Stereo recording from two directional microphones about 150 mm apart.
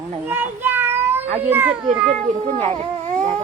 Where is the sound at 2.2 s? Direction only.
50° right (ahead or behind).